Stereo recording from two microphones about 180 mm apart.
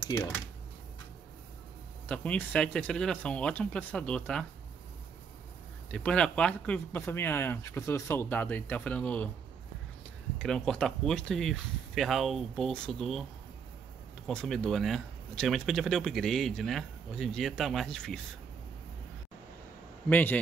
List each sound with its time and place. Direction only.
0.1 s speech: 20° left (ahead or behind)
2.0 s speech: 10° left (ahead or behind)
5.9 s speech: 5° left (ahead or behind)
10.4 s speech: 5° left (ahead or behind)
14.2 s speech: centre (ahead or behind)
20.1 s speech: 10° left (ahead or behind)